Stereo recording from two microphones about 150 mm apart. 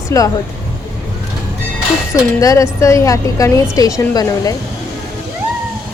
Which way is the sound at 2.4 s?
25° left (ahead or behind).